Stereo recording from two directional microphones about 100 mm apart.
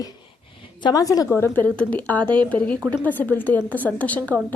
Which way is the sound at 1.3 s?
25° left (ahead or behind).